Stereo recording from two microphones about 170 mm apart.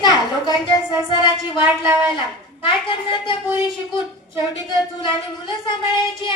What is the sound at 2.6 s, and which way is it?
Speech, 30° left (ahead or behind).